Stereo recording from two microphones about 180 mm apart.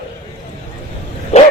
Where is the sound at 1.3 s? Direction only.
35° left (ahead or behind).